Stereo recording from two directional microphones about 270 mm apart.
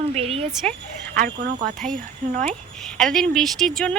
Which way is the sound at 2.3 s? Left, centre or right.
Right.